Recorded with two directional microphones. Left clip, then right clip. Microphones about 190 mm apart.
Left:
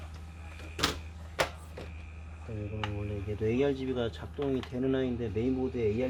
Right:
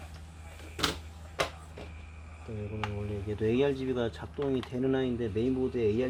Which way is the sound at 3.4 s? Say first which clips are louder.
Right 1 dB; 30° right (ahead or behind).